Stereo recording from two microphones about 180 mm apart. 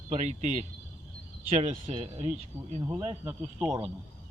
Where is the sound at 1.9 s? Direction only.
25° right (ahead or behind).